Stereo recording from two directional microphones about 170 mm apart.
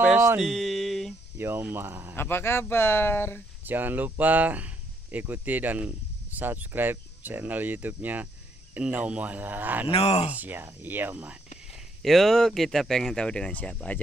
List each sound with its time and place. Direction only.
0.4 s a sound: centre (ahead or behind)
1.4 s speech: 15° right (ahead or behind)
2.1 s speech: 15° left (ahead or behind)
3.6 s speech: 10° right (ahead or behind)
9.8 s speech: 35° left (ahead or behind)
10.3 s speech: 10° right (ahead or behind)
11.7 s speech: centre (ahead or behind)